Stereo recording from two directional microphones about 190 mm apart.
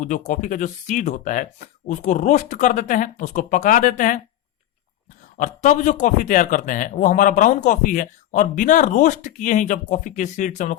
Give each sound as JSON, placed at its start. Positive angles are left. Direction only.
{"t": 0.0, "sound": "speech", "side_deg": 40}
{"t": 5.4, "sound": "speech", "side_deg": 40}